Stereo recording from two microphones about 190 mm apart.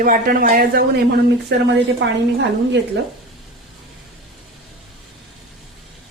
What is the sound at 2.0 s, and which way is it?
Speech, 70° right (ahead or behind).